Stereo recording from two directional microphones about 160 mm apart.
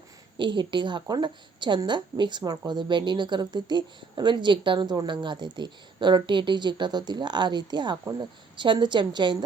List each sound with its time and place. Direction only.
0.3 s a woman's voice: 30° right (ahead or behind)